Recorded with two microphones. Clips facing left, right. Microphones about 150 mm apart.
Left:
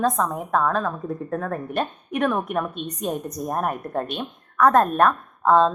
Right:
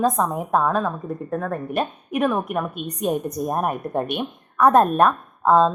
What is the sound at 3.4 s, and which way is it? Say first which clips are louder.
A woman's voice: right 2 dB; 20° right (ahead or behind).